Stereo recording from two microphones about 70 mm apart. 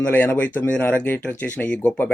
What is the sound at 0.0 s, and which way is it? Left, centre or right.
A man's voice, left.